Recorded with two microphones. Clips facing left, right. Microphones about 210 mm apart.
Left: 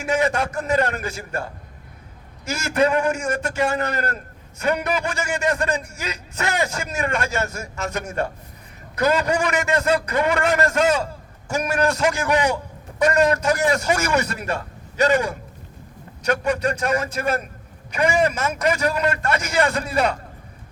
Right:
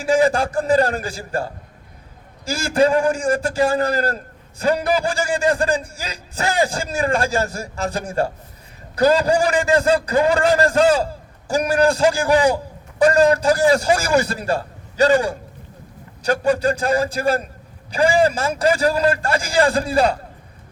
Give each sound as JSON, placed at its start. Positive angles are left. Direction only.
{"t": 0.0, "sound": "a man's voice", "side_deg": -30}